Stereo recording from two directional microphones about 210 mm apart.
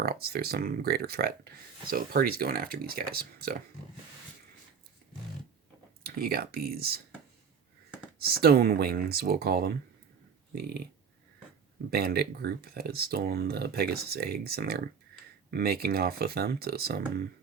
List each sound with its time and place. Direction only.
0.0 s speech: 45° right (ahead or behind)
6.0 s speech: 45° right (ahead or behind)
8.2 s speech: 45° right (ahead or behind)
11.9 s speech: 45° right (ahead or behind)